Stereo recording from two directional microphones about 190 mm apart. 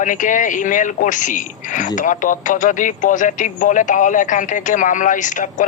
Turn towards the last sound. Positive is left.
turn(degrees=40)  # may be behind; listen again after turning